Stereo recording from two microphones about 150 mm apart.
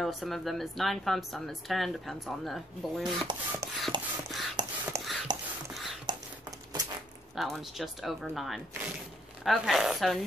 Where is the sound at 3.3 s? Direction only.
30° right (ahead or behind).